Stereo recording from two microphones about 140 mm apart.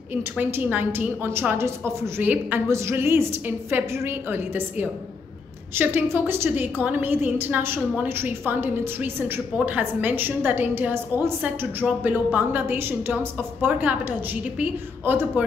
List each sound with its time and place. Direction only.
0.1 s a woman's voice: 15° right (ahead or behind)